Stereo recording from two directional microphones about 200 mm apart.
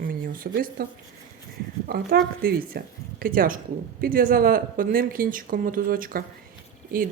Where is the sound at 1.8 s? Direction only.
50° right (ahead or behind).